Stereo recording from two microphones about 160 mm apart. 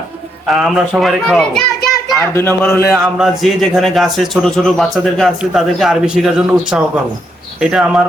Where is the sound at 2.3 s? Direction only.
15° left (ahead or behind).